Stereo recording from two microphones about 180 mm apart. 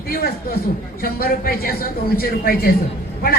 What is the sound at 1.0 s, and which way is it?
A woman's voice, 55° left (ahead or behind).